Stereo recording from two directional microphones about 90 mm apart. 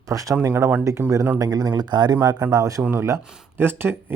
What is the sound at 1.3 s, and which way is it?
Speech, 45° right (ahead or behind).